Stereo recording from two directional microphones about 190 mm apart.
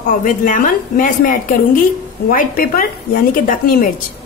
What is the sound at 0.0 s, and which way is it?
A woman's voice, 45° left (ahead or behind).